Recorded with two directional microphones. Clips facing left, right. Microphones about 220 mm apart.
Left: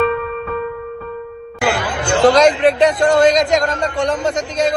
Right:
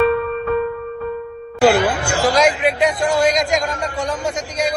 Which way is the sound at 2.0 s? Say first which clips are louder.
Left 9 dB; 20° left (ahead or behind).